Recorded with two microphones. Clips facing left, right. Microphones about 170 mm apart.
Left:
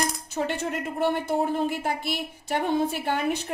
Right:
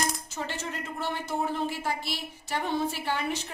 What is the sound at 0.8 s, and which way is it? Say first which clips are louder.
A woman's voice: left 10 dB; 55° left (ahead or behind).